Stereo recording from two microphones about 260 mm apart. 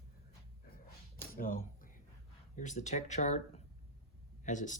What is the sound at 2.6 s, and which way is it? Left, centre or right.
Speech, left.